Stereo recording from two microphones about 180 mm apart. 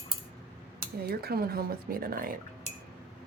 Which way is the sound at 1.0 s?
60° right (ahead or behind).